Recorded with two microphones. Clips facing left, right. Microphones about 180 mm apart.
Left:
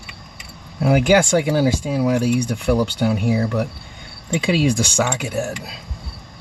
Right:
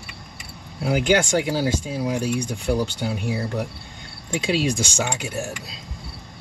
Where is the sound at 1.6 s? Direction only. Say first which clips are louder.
Left 5 dB; 65° left (ahead or behind).